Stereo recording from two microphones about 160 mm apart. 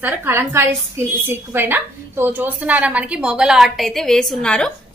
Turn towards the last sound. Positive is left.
turn(degrees=5)  # may be behind; listen again after turning